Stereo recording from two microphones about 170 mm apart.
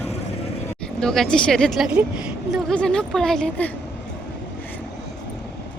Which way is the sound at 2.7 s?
5° left (ahead or behind).